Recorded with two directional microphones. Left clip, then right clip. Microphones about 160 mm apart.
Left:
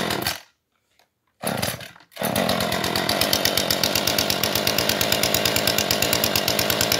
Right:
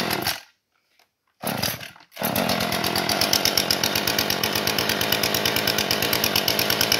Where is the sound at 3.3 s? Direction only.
45° left (ahead or behind).